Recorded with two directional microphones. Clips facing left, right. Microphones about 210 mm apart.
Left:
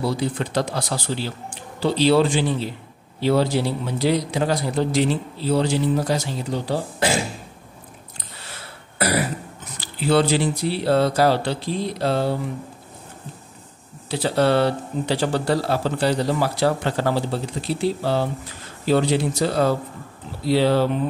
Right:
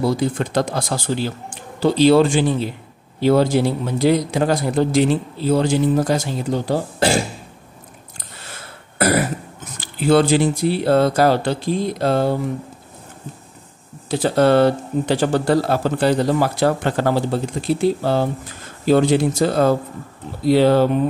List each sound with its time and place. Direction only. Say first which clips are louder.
0.0 s a man's voice: right 4 dB; 45° right (ahead or behind)
8.9 s throat clearing: right 5 dB; 50° right (ahead or behind)
9.8 s a man's voice: right 4 dB; 50° right (ahead or behind)
14.1 s a man's voice: right 4 dB; 50° right (ahead or behind)